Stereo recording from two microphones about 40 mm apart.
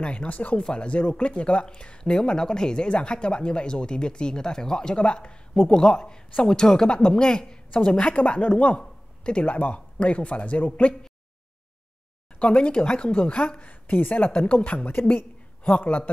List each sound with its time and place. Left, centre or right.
0.0 s speech: left
0.3 s speech: left
0.6 s speech: left
2.1 s speech: centre
8.2 s speech: left
8.8 s a sound: left
9.5 s speech: left
12.4 s speech: left
13.6 s a woman's voice: left